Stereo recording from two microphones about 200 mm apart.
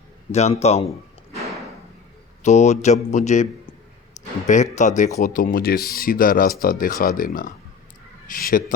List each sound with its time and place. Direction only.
0.3 s speech: 35° left (ahead or behind)
2.4 s speech: 35° left (ahead or behind)
4.4 s speech: 35° left (ahead or behind)